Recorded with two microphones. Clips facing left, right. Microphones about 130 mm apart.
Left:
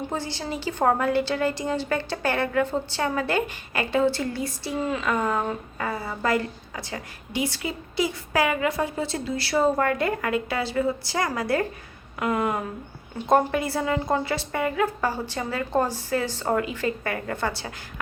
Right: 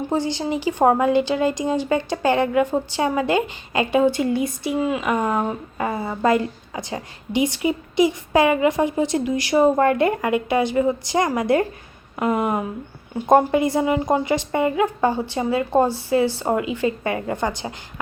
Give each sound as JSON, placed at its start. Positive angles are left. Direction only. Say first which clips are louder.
{"t": 0.1, "sound": "a woman's voice", "louder": "right 8 dB", "side_deg": -15}